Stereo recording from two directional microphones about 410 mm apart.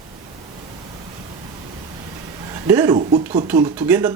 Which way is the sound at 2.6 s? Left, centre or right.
Centre.